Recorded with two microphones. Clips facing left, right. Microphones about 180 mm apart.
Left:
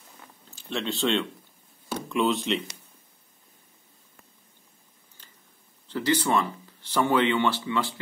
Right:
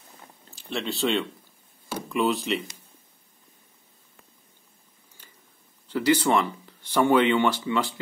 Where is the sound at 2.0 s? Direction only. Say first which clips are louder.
Even; centre (ahead or behind).